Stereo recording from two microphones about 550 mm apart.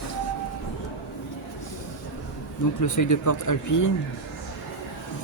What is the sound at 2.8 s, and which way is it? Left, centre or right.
Speech, left.